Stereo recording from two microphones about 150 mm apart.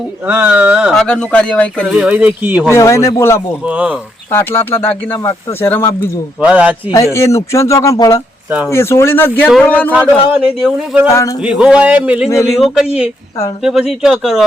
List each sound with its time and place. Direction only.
0.3 s a man's voice: 10° right (ahead or behind)
1.0 s speech: 5° left (ahead or behind)
1.9 s a man's voice: 5° right (ahead or behind)
2.7 s speech: 20° left (ahead or behind)
3.7 s a man's voice: 10° right (ahead or behind)
4.3 s speech: 15° left (ahead or behind)
6.4 s a man's voice: 10° right (ahead or behind)
6.9 s speech: 20° left (ahead or behind)
8.4 s a man's voice: 10° right (ahead or behind)
8.7 s speech: 15° left (ahead or behind)
9.9 s a man's voice: 10° right (ahead or behind)
11.1 s speech: 20° left (ahead or behind)
11.4 s a man's voice: 5° right (ahead or behind)